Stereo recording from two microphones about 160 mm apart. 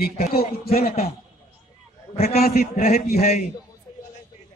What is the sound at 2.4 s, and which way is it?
Speech, 70° left (ahead or behind).